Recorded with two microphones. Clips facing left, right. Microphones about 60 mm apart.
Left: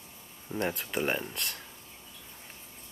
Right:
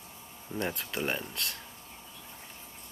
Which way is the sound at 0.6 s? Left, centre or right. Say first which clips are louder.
Left 2 dB; centre.